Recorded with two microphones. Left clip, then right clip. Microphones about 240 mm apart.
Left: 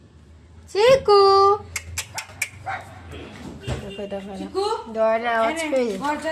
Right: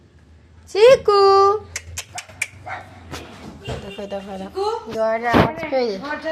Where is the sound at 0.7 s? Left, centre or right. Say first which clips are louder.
Right 3 dB; right.